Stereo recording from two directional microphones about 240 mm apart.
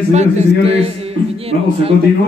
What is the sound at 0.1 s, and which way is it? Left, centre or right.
Speech, right.